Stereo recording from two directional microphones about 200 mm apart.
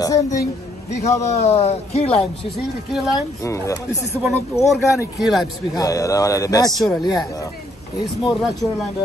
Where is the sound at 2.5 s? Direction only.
Centre (ahead or behind).